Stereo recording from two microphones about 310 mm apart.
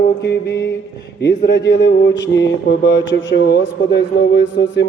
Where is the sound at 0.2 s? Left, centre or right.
Left.